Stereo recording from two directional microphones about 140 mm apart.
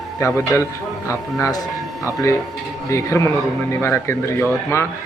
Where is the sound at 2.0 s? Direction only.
20° left (ahead or behind).